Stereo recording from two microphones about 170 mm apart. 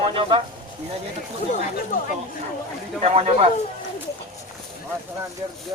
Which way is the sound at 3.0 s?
35° right (ahead or behind).